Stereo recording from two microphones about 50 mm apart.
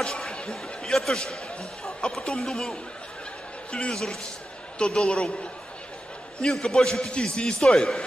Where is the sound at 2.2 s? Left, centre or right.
Centre.